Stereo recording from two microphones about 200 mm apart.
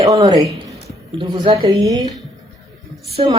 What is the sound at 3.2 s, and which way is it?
Speech, 25° right (ahead or behind).